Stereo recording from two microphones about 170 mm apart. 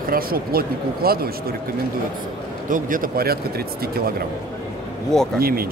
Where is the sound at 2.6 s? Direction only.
50° right (ahead or behind).